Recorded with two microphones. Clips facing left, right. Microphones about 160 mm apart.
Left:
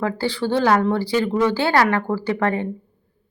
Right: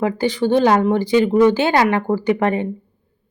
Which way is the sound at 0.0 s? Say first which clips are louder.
Right 4 dB; 15° right (ahead or behind).